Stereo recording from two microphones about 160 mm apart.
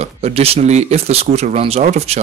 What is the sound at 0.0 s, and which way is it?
Speech, 40° right (ahead or behind).